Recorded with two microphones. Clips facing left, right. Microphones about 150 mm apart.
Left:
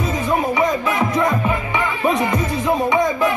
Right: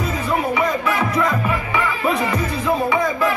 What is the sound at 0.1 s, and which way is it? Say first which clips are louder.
Music: left 2 dB; 20° left (ahead or behind).